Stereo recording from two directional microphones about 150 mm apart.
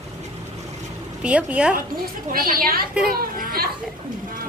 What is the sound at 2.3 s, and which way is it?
A woman's voice, 75° right (ahead or behind).